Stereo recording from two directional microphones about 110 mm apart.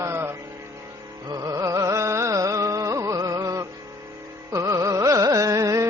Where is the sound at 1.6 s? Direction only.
30° right (ahead or behind).